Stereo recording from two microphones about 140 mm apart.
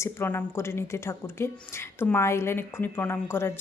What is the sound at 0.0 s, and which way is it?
Speech, 15° left (ahead or behind).